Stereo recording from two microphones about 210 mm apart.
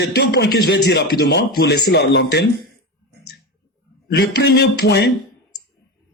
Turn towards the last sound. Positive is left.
turn(degrees=50)  # may be behind; listen again after turning